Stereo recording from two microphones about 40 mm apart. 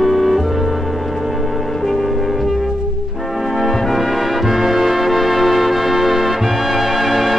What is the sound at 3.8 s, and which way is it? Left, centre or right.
Music, centre.